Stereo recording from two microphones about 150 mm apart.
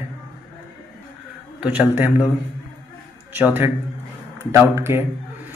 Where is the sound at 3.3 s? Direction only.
15° right (ahead or behind).